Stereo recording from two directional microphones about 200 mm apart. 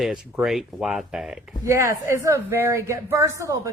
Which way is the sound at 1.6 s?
15° right (ahead or behind).